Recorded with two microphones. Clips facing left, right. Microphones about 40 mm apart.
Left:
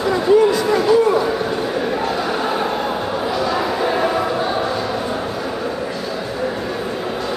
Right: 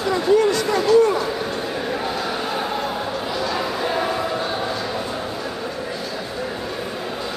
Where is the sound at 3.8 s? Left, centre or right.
Centre.